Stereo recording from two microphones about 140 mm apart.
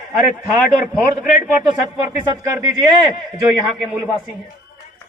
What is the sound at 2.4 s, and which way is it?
Speech, 20° right (ahead or behind).